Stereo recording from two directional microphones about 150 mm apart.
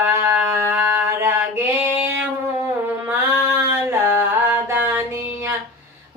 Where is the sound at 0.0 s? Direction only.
15° right (ahead or behind).